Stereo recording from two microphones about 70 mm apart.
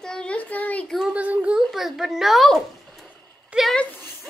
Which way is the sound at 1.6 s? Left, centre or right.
Centre.